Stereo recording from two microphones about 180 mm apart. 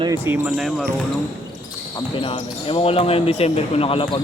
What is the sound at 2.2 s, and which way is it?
Speech, 30° left (ahead or behind).